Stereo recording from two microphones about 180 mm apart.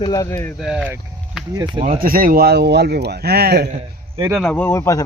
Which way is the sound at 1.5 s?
25° right (ahead or behind).